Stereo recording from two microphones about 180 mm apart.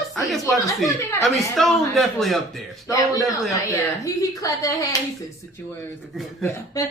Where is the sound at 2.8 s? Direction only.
20° left (ahead or behind).